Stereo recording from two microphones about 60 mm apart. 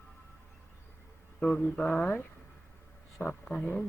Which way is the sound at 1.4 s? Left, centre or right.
Left.